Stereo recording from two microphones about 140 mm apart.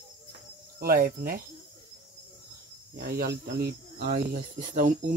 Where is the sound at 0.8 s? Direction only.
90° right.